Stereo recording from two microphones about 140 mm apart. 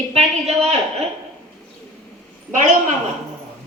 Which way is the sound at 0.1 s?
45° right (ahead or behind).